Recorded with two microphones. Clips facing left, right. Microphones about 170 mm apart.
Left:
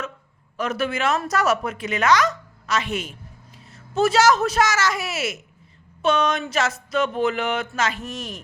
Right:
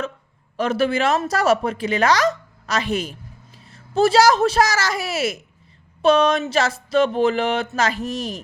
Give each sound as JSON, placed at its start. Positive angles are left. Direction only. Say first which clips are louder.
{"t": 0.5, "sound": "a woman's voice", "louder": "right 5 dB", "side_deg": -30}